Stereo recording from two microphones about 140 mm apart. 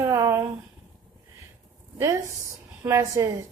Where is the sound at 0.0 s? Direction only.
20° right (ahead or behind).